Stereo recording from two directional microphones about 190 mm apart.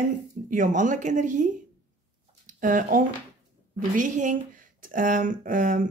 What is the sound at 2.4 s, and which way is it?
Speech, 45° right (ahead or behind).